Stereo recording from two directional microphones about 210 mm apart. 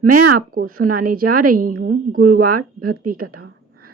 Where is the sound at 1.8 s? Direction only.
45° right (ahead or behind).